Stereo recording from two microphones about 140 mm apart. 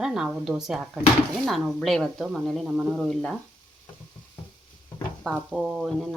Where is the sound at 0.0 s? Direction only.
5° right (ahead or behind).